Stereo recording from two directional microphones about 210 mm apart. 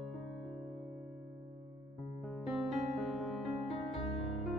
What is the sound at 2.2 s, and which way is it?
Music, centre (ahead or behind).